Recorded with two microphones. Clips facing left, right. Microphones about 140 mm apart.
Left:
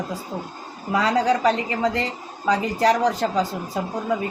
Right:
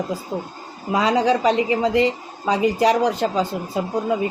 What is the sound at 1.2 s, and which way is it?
Speech, 30° right (ahead or behind).